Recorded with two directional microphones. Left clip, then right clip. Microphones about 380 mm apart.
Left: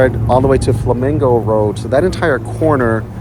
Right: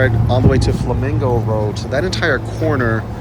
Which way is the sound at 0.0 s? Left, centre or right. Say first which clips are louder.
Left 5 dB; centre.